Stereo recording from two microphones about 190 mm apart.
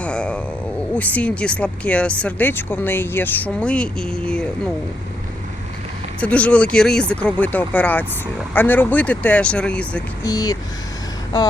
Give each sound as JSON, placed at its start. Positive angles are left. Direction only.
{"t": 0.0, "sound": "a sound", "side_deg": 5}
{"t": 0.9, "sound": "speech", "side_deg": 10}
{"t": 6.1, "sound": "speech", "side_deg": 5}
{"t": 10.2, "sound": "speech", "side_deg": 20}